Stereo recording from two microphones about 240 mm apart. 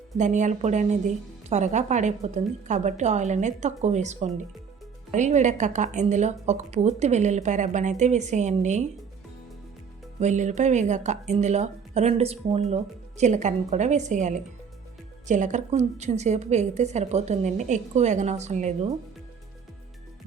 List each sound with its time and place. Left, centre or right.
0.2 s speech: right
10.2 s speech: right